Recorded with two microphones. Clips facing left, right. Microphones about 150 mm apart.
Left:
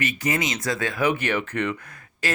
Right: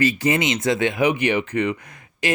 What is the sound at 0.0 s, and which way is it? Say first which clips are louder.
Speech: right 6 dB; 30° right (ahead or behind).